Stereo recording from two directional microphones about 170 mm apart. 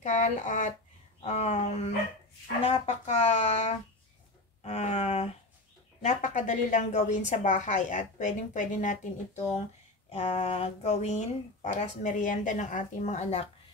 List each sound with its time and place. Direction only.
0.0 s a woman's voice: 45° left (ahead or behind)
4.6 s a sound: 40° left (ahead or behind)
6.0 s a woman's voice: 45° left (ahead or behind)
10.0 s speech: 35° left (ahead or behind)